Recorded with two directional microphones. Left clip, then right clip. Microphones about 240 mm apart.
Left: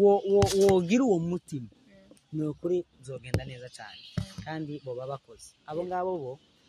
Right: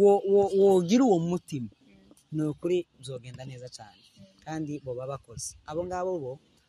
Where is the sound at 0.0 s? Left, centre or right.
Right.